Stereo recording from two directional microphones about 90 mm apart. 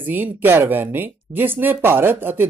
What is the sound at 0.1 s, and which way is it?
Speech, 20° right (ahead or behind).